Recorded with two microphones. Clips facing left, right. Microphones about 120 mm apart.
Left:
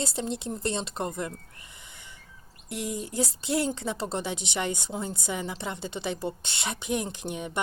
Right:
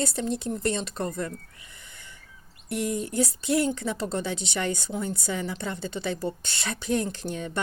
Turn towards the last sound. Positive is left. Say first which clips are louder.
# right 1 dB
turn(degrees=15)  # may be behind; listen again after turning